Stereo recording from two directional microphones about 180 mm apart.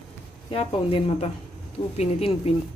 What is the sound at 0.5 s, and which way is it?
Speech, 30° left (ahead or behind).